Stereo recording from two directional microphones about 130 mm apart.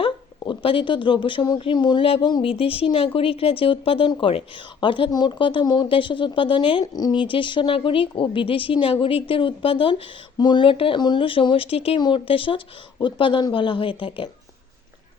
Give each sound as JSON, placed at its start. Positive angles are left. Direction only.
{"t": 0.0, "sound": "speech", "side_deg": 45}